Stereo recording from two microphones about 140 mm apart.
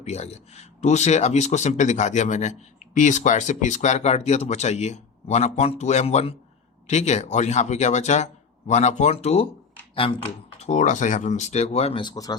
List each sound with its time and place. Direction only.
0.0 s speech: 50° left (ahead or behind)
10.6 s speech: 60° left (ahead or behind); by 12.4 s 25° left (ahead or behind)